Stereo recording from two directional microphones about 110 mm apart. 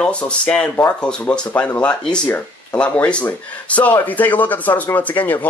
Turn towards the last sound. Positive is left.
turn(degrees=15)  # may be behind; listen again after turning